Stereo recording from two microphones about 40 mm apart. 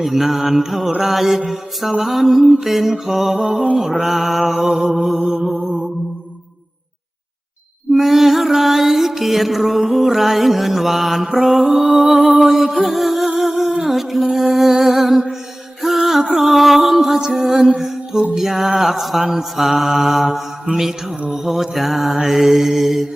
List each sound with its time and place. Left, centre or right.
0.0 s mantra: centre
7.9 s mantra: centre
12.4 s music: centre
17.3 s mantra: centre
17.7 s music: centre
18.3 s mantra: centre
20.7 s mantra: right
21.2 s mantra: centre